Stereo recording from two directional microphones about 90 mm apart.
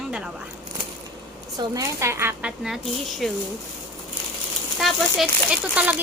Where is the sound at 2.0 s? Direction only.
30° right (ahead or behind).